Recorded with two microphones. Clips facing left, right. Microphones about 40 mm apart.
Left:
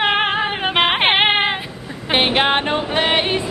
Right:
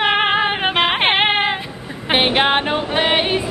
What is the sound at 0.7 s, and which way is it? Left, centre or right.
Music, centre.